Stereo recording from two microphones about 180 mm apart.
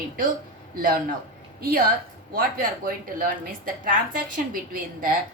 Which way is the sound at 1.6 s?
55° right (ahead or behind).